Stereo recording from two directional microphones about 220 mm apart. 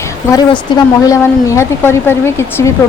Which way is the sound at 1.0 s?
15° left (ahead or behind).